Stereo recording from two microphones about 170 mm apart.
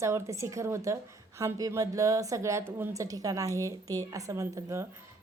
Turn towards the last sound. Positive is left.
turn(degrees=-15)  # may be behind; listen again after turning